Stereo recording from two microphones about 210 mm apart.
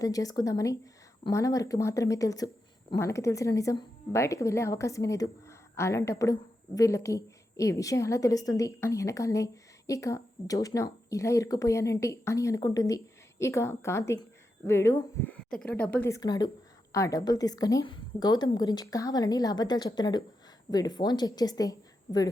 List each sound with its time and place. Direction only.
0.0 s a woman's voice: 15° left (ahead or behind)